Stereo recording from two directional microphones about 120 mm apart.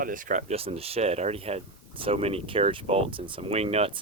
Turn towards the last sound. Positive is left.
turn(degrees=-60)  # may be behind; listen again after turning